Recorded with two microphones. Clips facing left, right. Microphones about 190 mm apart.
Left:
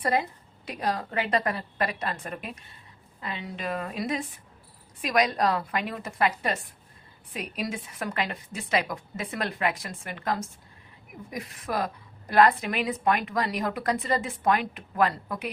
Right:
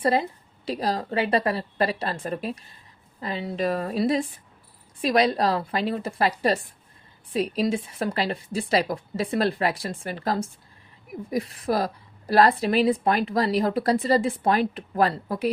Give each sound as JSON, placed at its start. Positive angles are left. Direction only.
{"t": 0.0, "sound": "a woman's voice", "side_deg": -30}